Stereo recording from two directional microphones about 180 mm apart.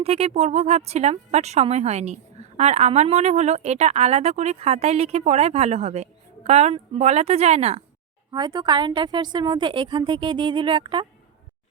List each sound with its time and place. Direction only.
0.0 s speech: 35° right (ahead or behind)
8.3 s a woman's voice: 25° right (ahead or behind)